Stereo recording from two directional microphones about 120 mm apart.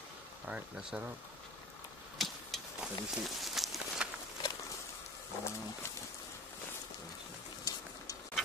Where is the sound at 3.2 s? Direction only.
Centre (ahead or behind).